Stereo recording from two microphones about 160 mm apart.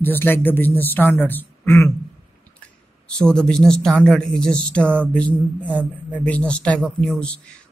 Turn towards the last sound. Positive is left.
turn(degrees=5)  # may be behind; listen again after turning